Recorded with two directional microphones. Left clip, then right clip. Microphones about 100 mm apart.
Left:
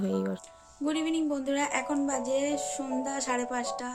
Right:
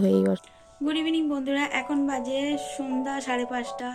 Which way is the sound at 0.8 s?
25° left (ahead or behind).